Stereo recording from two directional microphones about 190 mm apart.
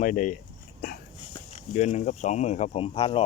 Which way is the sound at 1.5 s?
35° left (ahead or behind).